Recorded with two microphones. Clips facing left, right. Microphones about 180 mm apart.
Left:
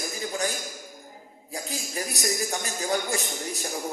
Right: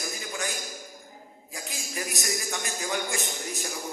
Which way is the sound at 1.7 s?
35° left (ahead or behind).